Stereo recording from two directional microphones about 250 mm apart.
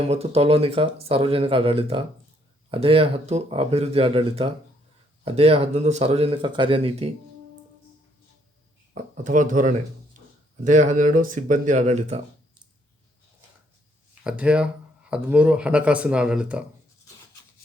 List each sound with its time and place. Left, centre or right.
0.1 s speech: right
9.1 s speech: right
14.3 s speech: centre